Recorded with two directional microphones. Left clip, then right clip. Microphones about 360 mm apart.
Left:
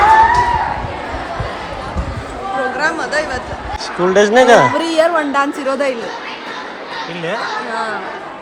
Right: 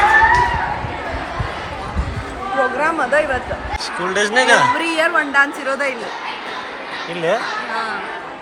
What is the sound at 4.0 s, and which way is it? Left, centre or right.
Speech, centre.